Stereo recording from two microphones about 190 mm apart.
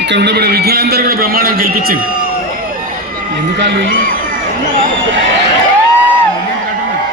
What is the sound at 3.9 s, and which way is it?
Speech, 45° right (ahead or behind).